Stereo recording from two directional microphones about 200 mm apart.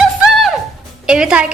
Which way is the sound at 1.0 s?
5° right (ahead or behind).